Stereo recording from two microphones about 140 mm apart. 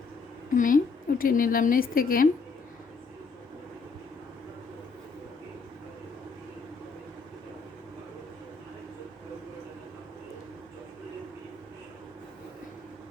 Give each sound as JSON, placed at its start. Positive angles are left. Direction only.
{"t": 0.5, "sound": "a woman's voice", "side_deg": 70}
{"t": 1.2, "sound": "a woman's voice", "side_deg": 85}